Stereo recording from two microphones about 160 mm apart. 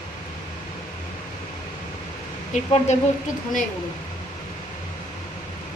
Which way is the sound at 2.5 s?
45° left (ahead or behind).